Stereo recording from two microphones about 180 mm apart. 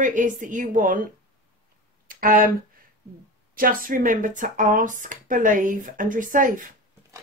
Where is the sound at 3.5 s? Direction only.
50° right (ahead or behind).